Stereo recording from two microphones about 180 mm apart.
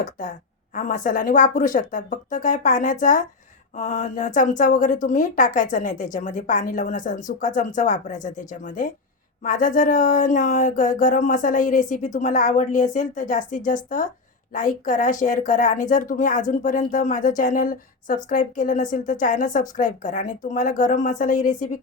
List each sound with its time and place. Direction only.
0.0 s speech: 45° left (ahead or behind)